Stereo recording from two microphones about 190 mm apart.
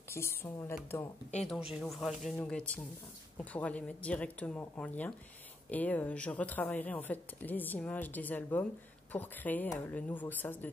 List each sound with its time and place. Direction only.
0.1 s speech: 15° left (ahead or behind)
1.4 s speech: centre (ahead or behind)